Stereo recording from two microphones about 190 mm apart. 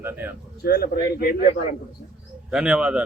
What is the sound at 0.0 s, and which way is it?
Speech, 10° right (ahead or behind).